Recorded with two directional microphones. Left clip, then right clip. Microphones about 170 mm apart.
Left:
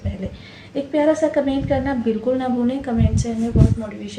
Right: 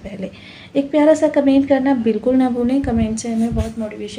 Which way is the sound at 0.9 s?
45° right (ahead or behind).